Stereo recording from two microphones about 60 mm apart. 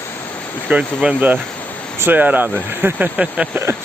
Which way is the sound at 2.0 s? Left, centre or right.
Right.